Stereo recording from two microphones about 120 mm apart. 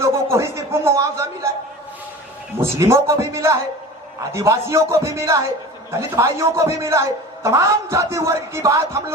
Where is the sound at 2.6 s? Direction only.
25° right (ahead or behind).